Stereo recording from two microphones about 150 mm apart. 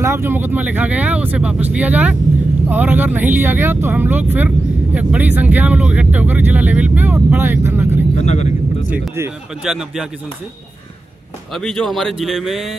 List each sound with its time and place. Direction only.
0.0 s speech: 15° right (ahead or behind)
8.2 s speech: 50° left (ahead or behind)
9.6 s speech: 5° right (ahead or behind)
11.5 s speech: centre (ahead or behind)